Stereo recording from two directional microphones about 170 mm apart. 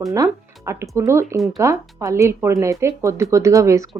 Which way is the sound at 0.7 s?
15° right (ahead or behind).